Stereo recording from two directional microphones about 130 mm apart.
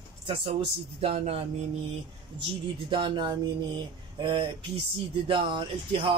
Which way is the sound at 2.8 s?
40° right (ahead or behind).